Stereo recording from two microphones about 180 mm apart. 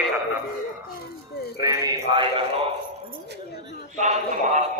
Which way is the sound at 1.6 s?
20° right (ahead or behind).